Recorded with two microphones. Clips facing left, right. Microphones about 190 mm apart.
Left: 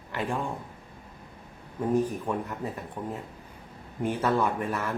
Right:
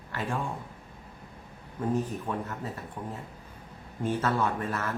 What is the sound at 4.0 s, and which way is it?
Speech, 15° left (ahead or behind).